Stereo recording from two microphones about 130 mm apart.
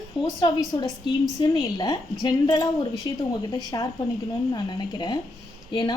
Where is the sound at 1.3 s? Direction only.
25° left (ahead or behind).